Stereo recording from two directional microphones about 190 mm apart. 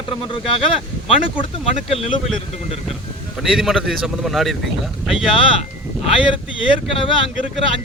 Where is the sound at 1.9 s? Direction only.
30° left (ahead or behind).